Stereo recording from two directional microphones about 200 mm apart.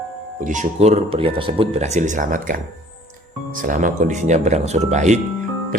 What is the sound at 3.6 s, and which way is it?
Speech, 40° right (ahead or behind).